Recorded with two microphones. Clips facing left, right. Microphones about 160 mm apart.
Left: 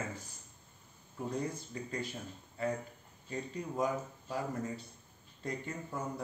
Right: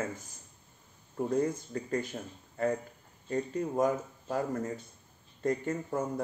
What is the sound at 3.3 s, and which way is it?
Speech, 45° right (ahead or behind).